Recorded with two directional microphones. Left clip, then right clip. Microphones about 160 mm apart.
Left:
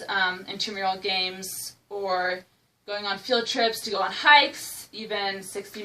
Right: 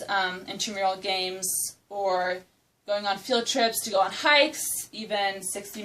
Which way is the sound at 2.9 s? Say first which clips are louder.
Right 1 dB; 15° right (ahead or behind).